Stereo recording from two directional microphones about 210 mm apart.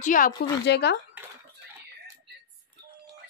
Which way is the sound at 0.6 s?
55° left (ahead or behind).